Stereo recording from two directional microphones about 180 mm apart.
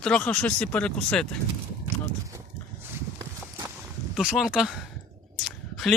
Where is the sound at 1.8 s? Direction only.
15° right (ahead or behind).